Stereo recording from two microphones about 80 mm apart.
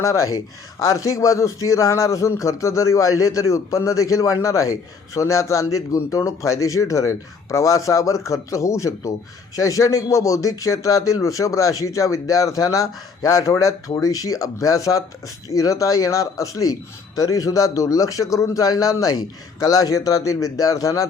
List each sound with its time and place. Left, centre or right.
0.0 s a man's voice: left